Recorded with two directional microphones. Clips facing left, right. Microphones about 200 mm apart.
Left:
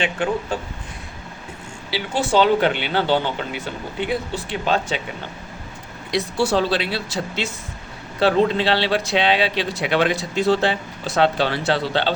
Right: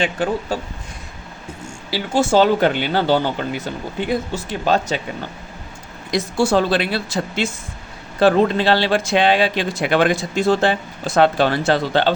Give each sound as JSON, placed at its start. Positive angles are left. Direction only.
{"t": 0.0, "sound": "speech", "side_deg": -40}
{"t": 1.9, "sound": "speech", "side_deg": -45}
{"t": 6.1, "sound": "speech", "side_deg": -45}